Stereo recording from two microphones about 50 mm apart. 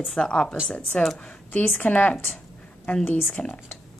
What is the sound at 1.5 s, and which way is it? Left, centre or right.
Speech, left.